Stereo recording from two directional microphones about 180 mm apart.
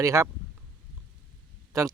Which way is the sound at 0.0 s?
15° right (ahead or behind).